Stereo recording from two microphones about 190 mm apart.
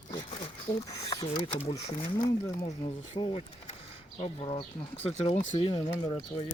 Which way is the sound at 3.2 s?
25° left (ahead or behind).